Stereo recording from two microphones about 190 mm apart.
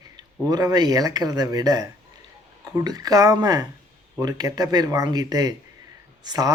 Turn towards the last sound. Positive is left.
turn(degrees=-20)  # may be behind; listen again after turning